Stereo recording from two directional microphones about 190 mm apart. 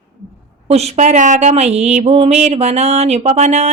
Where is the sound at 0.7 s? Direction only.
35° right (ahead or behind).